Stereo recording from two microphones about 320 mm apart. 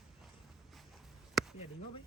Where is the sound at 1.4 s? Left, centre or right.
Centre.